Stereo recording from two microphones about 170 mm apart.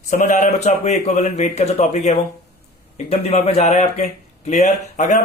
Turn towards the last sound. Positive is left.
turn(degrees=45)  # may be behind; listen again after turning